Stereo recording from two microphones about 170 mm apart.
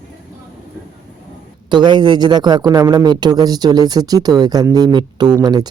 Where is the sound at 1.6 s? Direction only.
25° right (ahead or behind).